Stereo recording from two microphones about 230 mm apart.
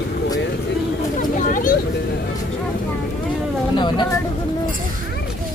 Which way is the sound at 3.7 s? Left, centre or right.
Centre.